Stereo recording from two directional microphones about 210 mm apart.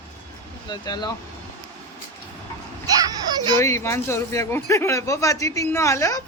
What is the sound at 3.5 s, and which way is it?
Speech, 15° left (ahead or behind).